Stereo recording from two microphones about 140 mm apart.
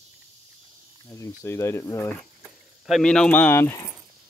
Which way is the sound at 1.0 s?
20° left (ahead or behind).